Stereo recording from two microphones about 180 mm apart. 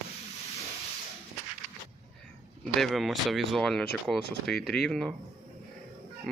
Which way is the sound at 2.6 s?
Centre (ahead or behind).